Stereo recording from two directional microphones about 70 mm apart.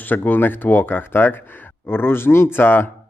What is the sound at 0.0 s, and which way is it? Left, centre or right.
A man's voice, left.